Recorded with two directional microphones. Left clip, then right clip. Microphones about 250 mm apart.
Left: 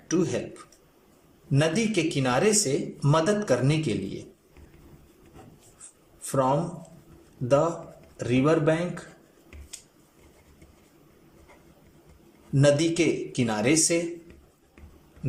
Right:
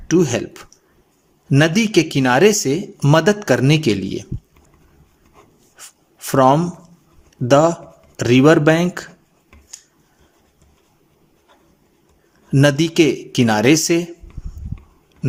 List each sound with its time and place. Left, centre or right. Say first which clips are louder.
0.1 s speech: right 10 dB; right
6.2 s speech: right 11 dB; right
12.5 s speech: right 7 dB; right